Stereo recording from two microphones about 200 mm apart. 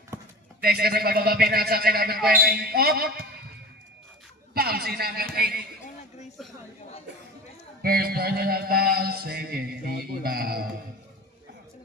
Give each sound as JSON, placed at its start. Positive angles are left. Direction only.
{"t": 0.1, "sound": "clip-clop", "side_deg": -15}
{"t": 0.6, "sound": "mantra", "side_deg": -50}
{"t": 4.5, "sound": "a man's voice", "side_deg": -50}
{"t": 7.8, "sound": "mantra", "side_deg": -50}